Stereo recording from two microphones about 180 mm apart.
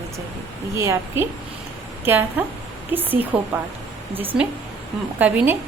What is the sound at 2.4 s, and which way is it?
A woman's voice, 10° right (ahead or behind).